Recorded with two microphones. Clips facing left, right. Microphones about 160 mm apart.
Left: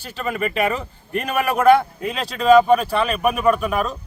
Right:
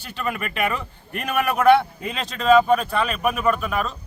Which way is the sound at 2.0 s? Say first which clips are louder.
Left 4 dB; centre (ahead or behind).